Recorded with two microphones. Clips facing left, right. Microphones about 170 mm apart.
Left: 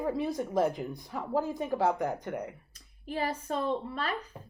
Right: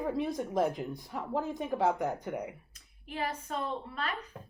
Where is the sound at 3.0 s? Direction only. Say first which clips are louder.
Left 4 dB; 35° left (ahead or behind).